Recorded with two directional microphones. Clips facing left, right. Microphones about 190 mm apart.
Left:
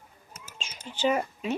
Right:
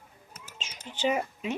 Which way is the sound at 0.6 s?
20° right (ahead or behind).